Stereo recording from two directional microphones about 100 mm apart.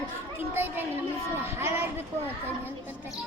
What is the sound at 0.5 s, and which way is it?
A woman's voice, 20° right (ahead or behind).